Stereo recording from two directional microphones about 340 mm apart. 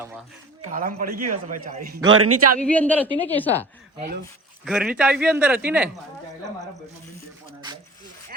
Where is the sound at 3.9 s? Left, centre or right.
Right.